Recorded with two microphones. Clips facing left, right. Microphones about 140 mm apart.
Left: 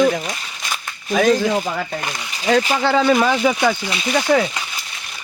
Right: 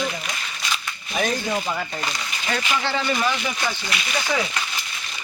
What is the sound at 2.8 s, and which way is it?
Speech, 90° left.